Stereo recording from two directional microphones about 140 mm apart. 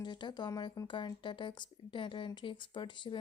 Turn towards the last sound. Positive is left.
turn(degrees=35)  # may be behind; listen again after turning